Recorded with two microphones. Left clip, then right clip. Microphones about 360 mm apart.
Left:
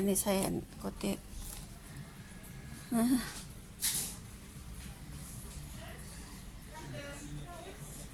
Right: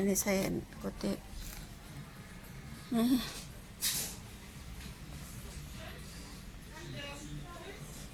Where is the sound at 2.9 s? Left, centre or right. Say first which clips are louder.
Even; centre.